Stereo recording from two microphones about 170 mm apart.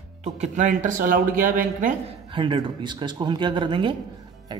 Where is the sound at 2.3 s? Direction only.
30° right (ahead or behind).